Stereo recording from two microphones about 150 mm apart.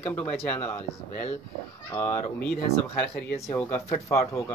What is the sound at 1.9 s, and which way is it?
Speech, 15° left (ahead or behind).